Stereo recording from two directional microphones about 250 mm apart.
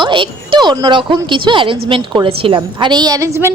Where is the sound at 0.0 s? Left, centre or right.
Centre.